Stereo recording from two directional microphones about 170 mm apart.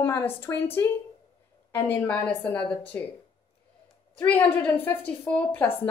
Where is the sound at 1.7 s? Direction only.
15° left (ahead or behind).